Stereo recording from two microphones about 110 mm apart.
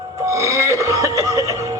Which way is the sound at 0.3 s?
30° right (ahead or behind).